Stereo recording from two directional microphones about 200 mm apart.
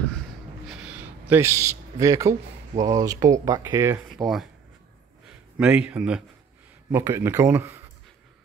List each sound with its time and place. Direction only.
0.7 s a sound: 5° right (ahead or behind)
1.3 s speech: 15° right (ahead or behind)
4.2 s speech: centre (ahead or behind)
5.6 s speech: 5° right (ahead or behind)